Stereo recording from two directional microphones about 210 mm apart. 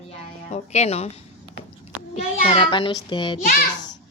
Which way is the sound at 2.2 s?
30° left (ahead or behind).